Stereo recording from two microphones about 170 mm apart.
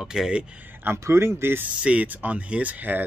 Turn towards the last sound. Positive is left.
turn(degrees=-10)  # may be behind; listen again after turning